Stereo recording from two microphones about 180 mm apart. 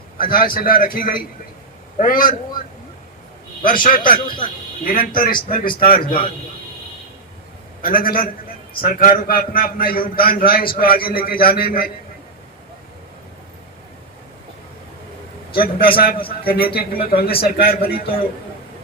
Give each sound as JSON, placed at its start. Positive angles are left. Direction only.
{"t": 0.2, "sound": "a man's voice", "side_deg": 55}
{"t": 3.6, "sound": "a man's voice", "side_deg": 50}
{"t": 4.3, "sound": "speech", "side_deg": 25}
{"t": 4.8, "sound": "a man's voice", "side_deg": 50}
{"t": 7.8, "sound": "a man's voice", "side_deg": 55}
{"t": 15.6, "sound": "a man's voice", "side_deg": 55}